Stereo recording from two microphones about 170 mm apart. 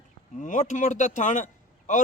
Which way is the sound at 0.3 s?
45° left (ahead or behind).